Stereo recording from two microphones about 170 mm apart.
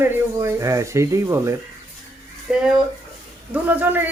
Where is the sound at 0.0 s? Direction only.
15° right (ahead or behind).